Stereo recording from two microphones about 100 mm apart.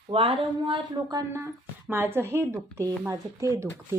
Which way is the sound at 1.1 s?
30° right (ahead or behind).